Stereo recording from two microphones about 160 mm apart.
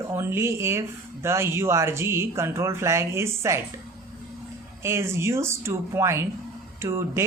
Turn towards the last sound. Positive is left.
turn(degrees=-15)  # may be behind; listen again after turning